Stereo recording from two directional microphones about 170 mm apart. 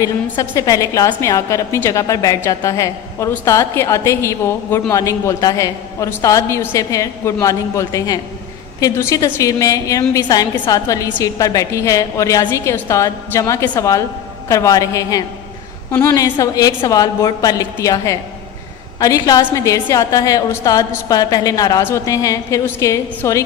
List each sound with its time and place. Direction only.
0.0 s a woman's voice: 20° left (ahead or behind)